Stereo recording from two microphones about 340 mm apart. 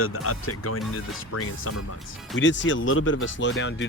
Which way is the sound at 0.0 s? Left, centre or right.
Left.